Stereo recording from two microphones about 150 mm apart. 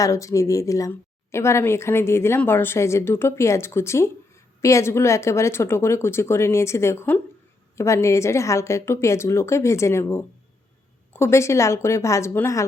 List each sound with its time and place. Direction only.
0.0 s a woman's voice: 20° left (ahead or behind)